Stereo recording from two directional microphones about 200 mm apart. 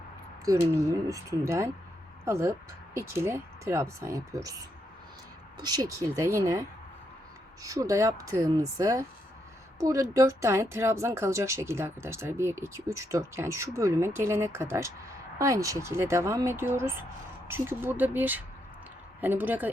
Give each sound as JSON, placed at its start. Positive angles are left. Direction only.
{"t": 0.4, "sound": "speech", "side_deg": -15}
{"t": 5.5, "sound": "speech", "side_deg": -20}